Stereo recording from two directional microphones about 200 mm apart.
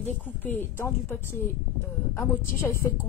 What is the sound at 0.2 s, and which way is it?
Speech, 10° left (ahead or behind).